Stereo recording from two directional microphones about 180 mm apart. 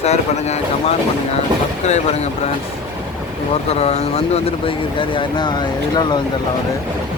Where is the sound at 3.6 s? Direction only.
35° left (ahead or behind).